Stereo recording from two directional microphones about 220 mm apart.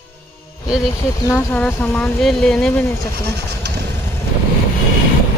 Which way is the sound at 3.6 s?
50° right (ahead or behind).